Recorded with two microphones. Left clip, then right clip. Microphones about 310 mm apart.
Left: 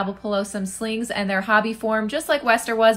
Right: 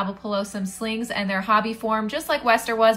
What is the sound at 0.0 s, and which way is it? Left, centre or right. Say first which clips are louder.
A woman's voice: left 2 dB; centre.